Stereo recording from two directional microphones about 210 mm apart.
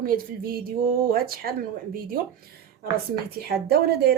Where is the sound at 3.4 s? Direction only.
50° right (ahead or behind).